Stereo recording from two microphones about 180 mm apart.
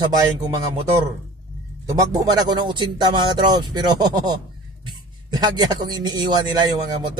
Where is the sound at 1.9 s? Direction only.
20° right (ahead or behind).